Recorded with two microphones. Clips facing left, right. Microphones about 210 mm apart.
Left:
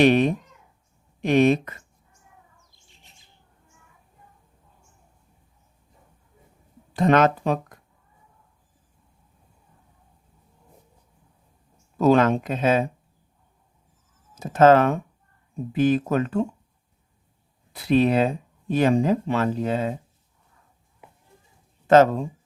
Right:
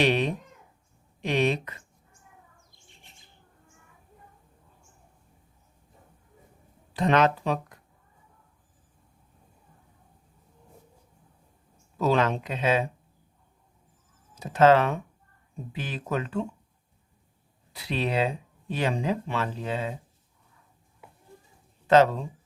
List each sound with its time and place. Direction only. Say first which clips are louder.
0.0 s speech: left 7 dB; 50° left (ahead or behind)
6.9 s speech: left 4 dB; 45° left (ahead or behind)
11.9 s speech: left 6 dB; 45° left (ahead or behind)
14.3 s speech: left 4 dB; 45° left (ahead or behind)
17.7 s speech: left 10 dB; 50° left (ahead or behind)
21.8 s speech: left 4 dB; 45° left (ahead or behind)